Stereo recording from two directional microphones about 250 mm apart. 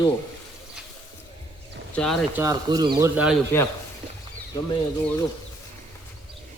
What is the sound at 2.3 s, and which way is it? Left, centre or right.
Speech, centre.